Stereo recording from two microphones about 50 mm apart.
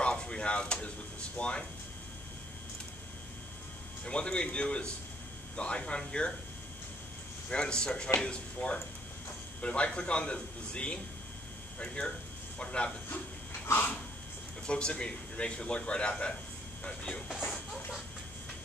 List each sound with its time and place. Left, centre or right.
0.0 s speech: centre
4.0 s speech: centre
7.4 s a man's voice: centre
14.7 s speech: centre
17.3 s speech: centre